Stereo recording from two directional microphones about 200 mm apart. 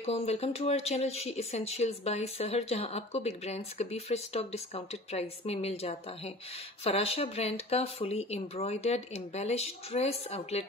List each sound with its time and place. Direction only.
0.0 s speech: 30° left (ahead or behind)